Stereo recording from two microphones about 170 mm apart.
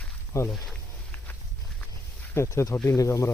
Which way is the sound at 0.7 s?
10° left (ahead or behind).